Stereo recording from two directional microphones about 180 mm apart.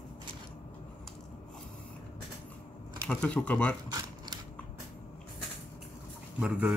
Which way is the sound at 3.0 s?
5° left (ahead or behind).